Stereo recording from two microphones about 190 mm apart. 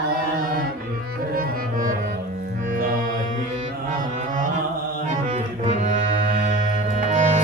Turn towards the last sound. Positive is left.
turn(degrees=-40)  # may be behind; listen again after turning